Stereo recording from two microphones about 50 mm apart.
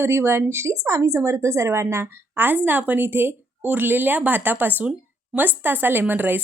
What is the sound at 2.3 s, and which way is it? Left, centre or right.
A woman's voice, right.